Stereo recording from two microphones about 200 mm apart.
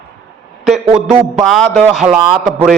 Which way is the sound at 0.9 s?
10° right (ahead or behind).